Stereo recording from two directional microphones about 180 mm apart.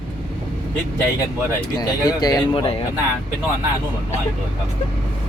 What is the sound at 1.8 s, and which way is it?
Speech, 20° left (ahead or behind).